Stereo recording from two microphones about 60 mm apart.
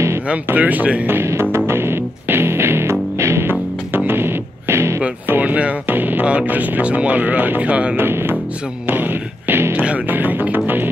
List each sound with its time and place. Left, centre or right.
0.6 s speech: right
1.0 s speech: right
1.7 s music: right
3.4 s music: right
5.3 s speech: right
7.9 s speech: right
8.8 s music: right
9.7 s music: right